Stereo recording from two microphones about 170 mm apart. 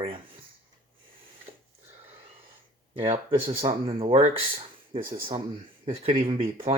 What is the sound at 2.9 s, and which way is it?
Speech, 35° right (ahead or behind).